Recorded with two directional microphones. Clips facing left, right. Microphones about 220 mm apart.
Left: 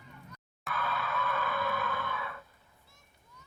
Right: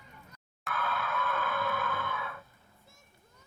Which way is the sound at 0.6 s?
Centre (ahead or behind).